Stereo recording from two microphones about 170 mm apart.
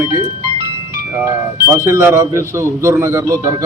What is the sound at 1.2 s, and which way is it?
A man's voice, 15° right (ahead or behind).